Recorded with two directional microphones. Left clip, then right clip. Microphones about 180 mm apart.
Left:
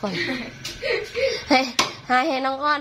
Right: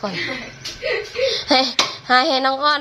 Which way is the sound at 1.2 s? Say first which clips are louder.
Right 3 dB; centre (ahead or behind).